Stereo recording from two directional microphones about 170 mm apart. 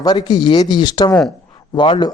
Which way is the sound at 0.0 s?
25° left (ahead or behind).